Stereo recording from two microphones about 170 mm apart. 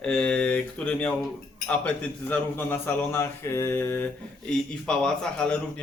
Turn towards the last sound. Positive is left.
turn(degrees=5)  # may be behind; listen again after turning